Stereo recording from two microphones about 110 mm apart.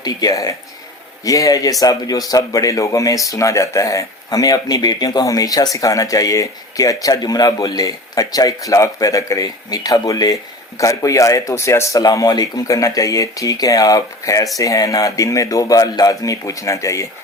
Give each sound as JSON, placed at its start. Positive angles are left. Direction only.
{"t": 0.0, "sound": "speech", "side_deg": 35}